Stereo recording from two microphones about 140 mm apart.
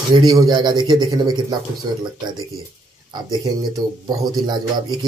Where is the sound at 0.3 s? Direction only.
30° right (ahead or behind).